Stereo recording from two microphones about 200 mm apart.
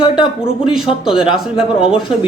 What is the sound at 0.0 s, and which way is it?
Speech, 25° left (ahead or behind).